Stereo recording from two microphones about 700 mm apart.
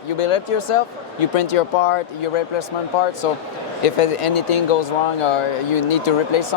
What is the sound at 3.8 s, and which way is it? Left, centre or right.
Speech, left.